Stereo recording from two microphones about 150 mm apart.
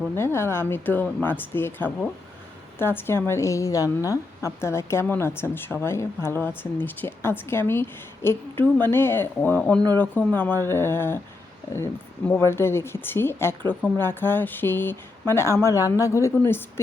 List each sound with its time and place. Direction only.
0.2 s speech: 15° left (ahead or behind)
12.3 s speech: 15° left (ahead or behind)